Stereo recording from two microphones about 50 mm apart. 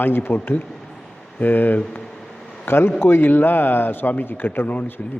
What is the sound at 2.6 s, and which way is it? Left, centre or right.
A man's voice, left.